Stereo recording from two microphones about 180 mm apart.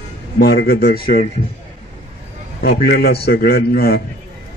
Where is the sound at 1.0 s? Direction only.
30° left (ahead or behind).